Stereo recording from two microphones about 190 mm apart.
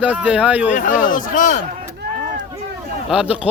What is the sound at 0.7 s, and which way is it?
Speech, 45° left (ahead or behind).